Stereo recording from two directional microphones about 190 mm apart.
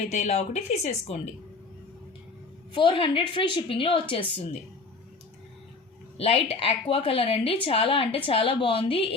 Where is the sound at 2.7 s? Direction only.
25° left (ahead or behind).